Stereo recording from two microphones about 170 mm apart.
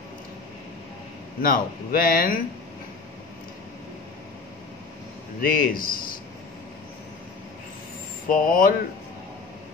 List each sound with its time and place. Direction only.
1.4 s speech: 60° left (ahead or behind)
5.4 s speech: 60° left (ahead or behind)
8.3 s speech: 55° left (ahead or behind)